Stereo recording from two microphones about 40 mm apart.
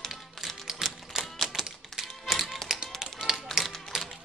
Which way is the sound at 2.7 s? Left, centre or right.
Centre.